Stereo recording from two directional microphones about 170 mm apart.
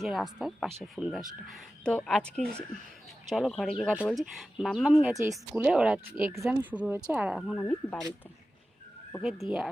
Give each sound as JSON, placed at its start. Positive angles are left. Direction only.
{"t": 0.0, "sound": "speech", "side_deg": 0}
{"t": 7.3, "sound": "speech", "side_deg": 0}
{"t": 9.2, "sound": "speech", "side_deg": 0}